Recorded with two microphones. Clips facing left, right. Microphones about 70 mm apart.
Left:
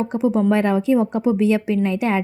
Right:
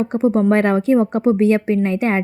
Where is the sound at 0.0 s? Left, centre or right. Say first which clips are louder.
Right 2 dB; right.